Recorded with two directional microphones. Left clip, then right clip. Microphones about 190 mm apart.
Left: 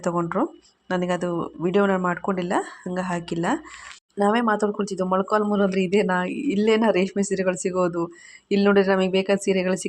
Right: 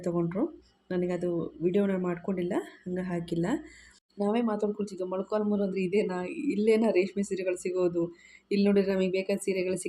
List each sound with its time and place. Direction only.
0.2 s speech: 10° left (ahead or behind)